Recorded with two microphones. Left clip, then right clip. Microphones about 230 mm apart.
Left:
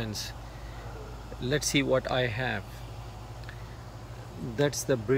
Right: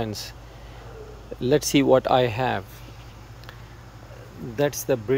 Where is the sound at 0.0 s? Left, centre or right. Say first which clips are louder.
Right 6 dB; right.